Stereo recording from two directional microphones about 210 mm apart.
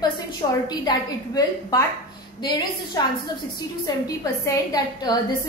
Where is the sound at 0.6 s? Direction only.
20° left (ahead or behind).